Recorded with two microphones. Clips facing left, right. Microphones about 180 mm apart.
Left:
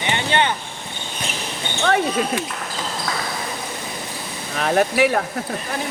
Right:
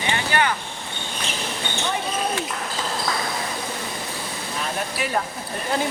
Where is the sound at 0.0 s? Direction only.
25° left (ahead or behind).